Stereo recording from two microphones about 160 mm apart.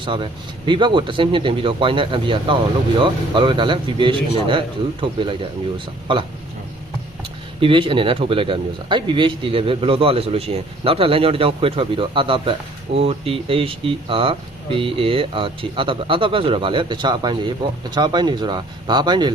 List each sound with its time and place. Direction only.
0.0 s speech: 30° right (ahead or behind)
7.6 s speech: 30° right (ahead or behind)